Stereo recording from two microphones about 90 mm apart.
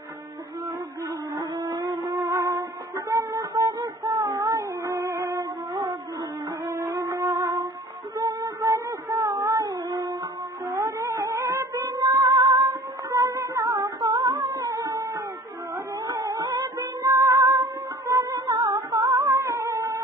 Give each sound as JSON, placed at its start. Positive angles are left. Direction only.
{"t": 1.6, "sound": "a sound", "side_deg": -45}
{"t": 2.1, "sound": "music", "side_deg": -35}
{"t": 3.1, "sound": "child singing", "side_deg": -40}
{"t": 6.7, "sound": "music", "side_deg": -35}
{"t": 8.2, "sound": "a sound", "side_deg": -40}
{"t": 10.7, "sound": "music", "side_deg": -35}
{"t": 16.1, "sound": "music", "side_deg": -40}